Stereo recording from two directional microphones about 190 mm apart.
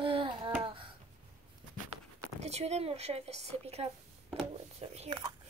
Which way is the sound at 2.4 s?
35° right (ahead or behind).